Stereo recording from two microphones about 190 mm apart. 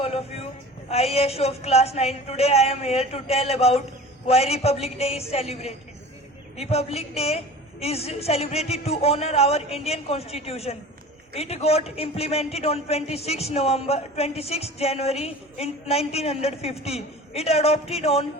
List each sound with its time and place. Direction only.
0.0 s a man's voice: 35° left (ahead or behind)